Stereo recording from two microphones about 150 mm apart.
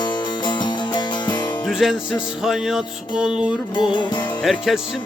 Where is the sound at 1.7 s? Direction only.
Centre (ahead or behind).